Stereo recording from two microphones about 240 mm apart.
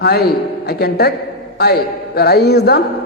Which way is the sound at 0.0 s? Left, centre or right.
Left.